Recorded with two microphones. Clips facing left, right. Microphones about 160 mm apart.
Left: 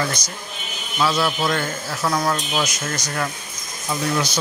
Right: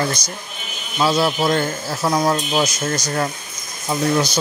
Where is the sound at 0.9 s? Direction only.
25° right (ahead or behind).